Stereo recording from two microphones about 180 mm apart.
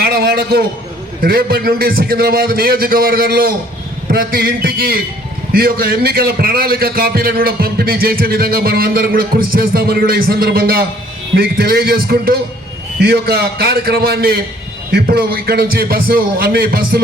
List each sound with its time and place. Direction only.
0.0 s a man's voice: 60° right (ahead or behind)